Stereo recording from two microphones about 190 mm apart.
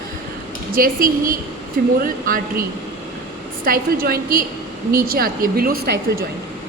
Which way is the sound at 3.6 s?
50° right (ahead or behind).